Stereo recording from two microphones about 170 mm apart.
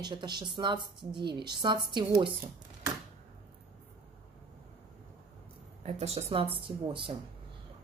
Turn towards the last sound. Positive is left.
turn(degrees=-30)  # may be behind; listen again after turning